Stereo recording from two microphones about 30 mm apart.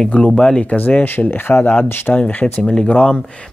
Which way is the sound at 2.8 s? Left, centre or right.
Left.